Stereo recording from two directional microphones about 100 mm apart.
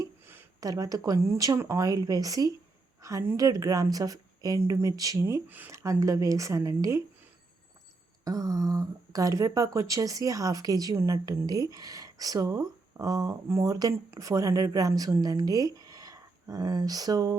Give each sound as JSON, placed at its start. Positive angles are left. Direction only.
{"t": 0.6, "sound": "speech", "side_deg": -35}
{"t": 5.2, "sound": "speech", "side_deg": -20}
{"t": 5.7, "sound": "speech", "side_deg": -35}
{"t": 8.2, "sound": "speech", "side_deg": -35}